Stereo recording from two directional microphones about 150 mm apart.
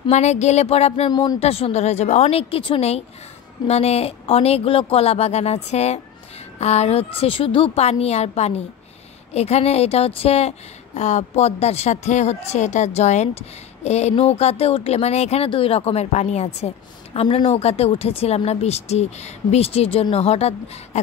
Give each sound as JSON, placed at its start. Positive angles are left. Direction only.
{"t": 0.1, "sound": "a woman's voice", "side_deg": 50}
{"t": 1.1, "sound": "speech", "side_deg": 25}
{"t": 1.4, "sound": "a woman's voice", "side_deg": 45}